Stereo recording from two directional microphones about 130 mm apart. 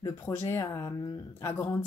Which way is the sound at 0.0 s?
20° left (ahead or behind).